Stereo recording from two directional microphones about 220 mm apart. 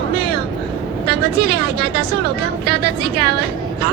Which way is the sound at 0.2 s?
45° right (ahead or behind).